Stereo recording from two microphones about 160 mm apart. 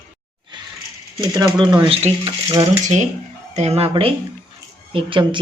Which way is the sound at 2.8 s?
50° right (ahead or behind).